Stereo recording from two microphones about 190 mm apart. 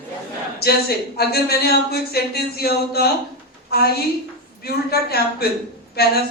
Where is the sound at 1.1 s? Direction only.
55° left (ahead or behind).